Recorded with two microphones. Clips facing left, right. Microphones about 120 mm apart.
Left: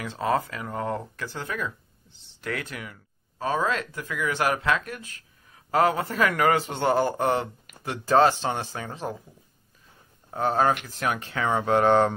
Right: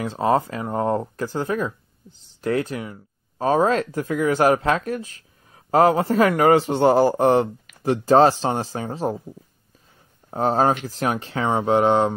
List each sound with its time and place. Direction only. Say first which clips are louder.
0.0 s speech: right 6 dB; 35° right (ahead or behind)
10.3 s speech: right 4 dB; 35° right (ahead or behind); by 12.2 s 15° right (ahead or behind)